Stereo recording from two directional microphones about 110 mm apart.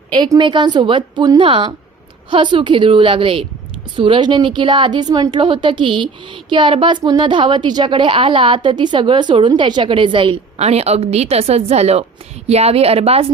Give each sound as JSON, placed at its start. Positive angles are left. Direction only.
{"t": 0.3, "sound": "a woman's voice", "side_deg": -45}
{"t": 10.6, "sound": "a woman's voice", "side_deg": -75}